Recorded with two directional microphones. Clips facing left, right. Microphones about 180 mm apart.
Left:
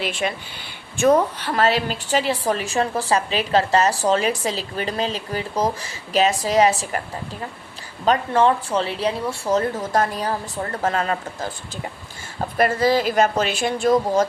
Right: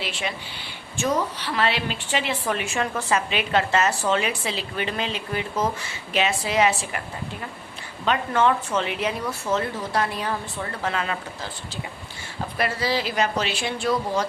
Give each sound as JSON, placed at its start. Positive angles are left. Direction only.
{"t": 0.0, "sound": "a woman's voice", "side_deg": 50}
{"t": 8.0, "sound": "a woman's voice", "side_deg": 35}